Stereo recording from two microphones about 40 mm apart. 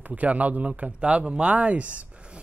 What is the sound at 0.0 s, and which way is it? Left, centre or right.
Speech, right.